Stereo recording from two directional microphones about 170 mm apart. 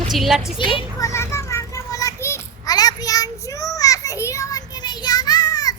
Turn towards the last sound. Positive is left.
turn(degrees=20)  # may be behind; listen again after turning